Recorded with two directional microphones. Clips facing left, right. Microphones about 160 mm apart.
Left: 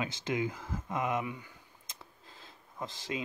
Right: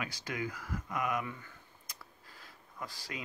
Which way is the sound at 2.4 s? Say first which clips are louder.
Left 4 dB; 20° left (ahead or behind).